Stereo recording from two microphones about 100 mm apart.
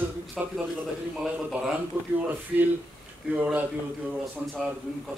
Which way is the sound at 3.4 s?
15° right (ahead or behind).